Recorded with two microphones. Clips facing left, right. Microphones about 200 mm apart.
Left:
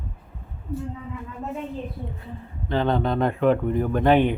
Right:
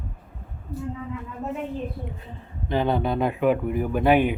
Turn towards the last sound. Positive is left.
turn(degrees=-10)  # may be behind; listen again after turning